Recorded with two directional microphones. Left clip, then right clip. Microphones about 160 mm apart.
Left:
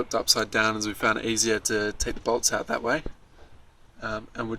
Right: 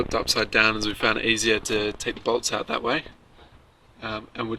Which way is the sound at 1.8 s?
20° left (ahead or behind).